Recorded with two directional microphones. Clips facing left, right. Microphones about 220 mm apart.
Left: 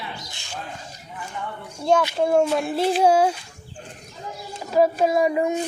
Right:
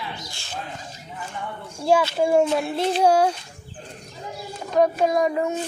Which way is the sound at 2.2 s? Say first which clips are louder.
Even; 5° right (ahead or behind).